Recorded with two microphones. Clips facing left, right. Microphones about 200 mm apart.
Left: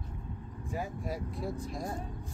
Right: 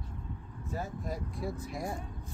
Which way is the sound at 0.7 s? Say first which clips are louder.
Left 1 dB; 10° left (ahead or behind).